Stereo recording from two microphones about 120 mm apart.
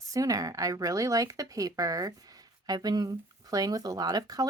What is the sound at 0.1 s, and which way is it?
Speech, 30° right (ahead or behind).